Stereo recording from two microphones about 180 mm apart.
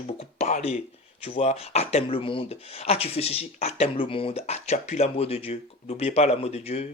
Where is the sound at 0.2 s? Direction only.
40° left (ahead or behind).